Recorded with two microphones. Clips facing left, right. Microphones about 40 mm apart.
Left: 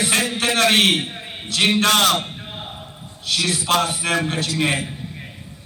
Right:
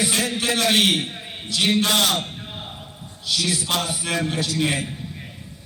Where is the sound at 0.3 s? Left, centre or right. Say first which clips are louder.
Left 5 dB; left.